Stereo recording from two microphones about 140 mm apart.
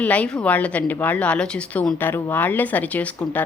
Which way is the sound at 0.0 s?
10° left (ahead or behind).